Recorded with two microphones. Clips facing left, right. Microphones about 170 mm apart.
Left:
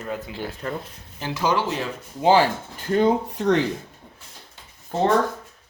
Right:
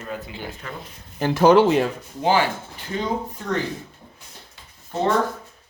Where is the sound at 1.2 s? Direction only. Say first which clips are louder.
Right 9 dB; 50° right (ahead or behind).